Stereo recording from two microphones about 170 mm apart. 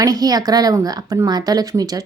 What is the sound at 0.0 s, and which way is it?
A woman's voice, 20° right (ahead or behind).